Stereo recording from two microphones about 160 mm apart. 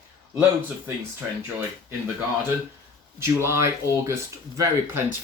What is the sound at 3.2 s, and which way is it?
Speech, 15° right (ahead or behind).